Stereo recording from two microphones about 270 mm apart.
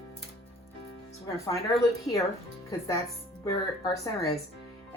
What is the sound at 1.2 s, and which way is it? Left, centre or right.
Speech, centre.